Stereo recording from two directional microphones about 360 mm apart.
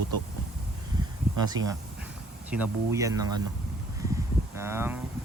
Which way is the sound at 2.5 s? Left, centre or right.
Centre.